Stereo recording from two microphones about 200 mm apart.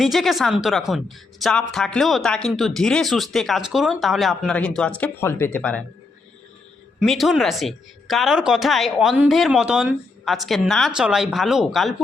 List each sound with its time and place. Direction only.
0.0 s a man's voice: centre (ahead or behind)
7.0 s speech: centre (ahead or behind)